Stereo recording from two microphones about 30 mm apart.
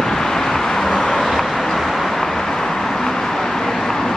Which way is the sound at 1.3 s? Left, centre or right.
Centre.